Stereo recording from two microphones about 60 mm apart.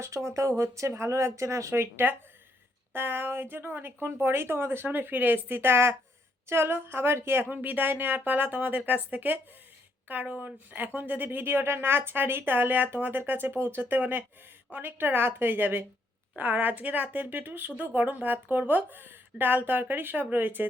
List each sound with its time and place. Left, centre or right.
0.0 s a woman's voice: right
7.5 s a woman's voice: right